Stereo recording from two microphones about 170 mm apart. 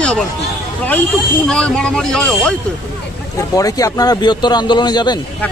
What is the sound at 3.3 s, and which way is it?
Speech, 20° left (ahead or behind).